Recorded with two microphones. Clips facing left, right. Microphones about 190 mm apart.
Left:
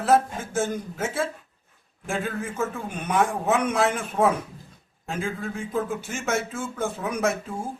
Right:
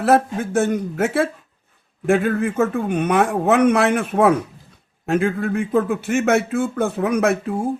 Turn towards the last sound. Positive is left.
turn(degrees=-65)  # may be behind; listen again after turning